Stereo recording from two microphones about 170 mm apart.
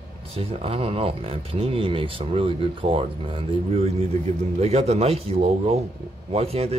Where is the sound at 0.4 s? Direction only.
35° right (ahead or behind).